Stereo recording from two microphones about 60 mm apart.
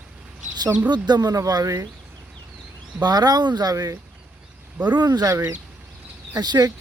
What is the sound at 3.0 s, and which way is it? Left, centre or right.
Speech, right.